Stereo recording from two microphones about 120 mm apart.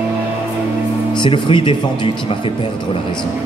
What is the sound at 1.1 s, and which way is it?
Speech, 40° left (ahead or behind).